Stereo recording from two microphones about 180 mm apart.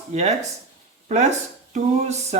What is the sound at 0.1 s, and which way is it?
Speech, 40° right (ahead or behind).